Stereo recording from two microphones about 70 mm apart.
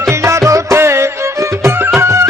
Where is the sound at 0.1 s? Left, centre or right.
Right.